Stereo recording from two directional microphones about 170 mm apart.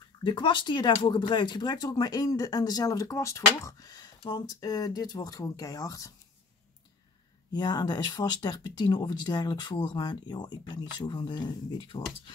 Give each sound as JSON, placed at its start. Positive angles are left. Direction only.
{"t": 0.2, "sound": "speech", "side_deg": 25}
{"t": 7.5, "sound": "speech", "side_deg": 25}